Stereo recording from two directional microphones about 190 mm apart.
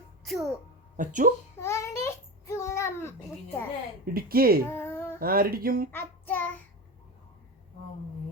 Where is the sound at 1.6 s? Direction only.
15° left (ahead or behind).